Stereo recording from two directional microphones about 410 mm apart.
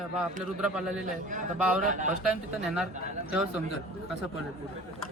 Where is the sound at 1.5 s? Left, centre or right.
Centre.